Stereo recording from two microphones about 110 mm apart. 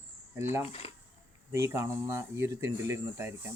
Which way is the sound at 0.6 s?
65° left (ahead or behind).